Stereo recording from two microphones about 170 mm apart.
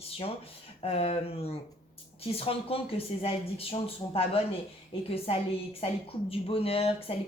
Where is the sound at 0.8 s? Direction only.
35° left (ahead or behind).